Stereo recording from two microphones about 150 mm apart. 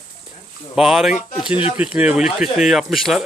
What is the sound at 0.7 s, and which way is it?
Speech, 5° right (ahead or behind).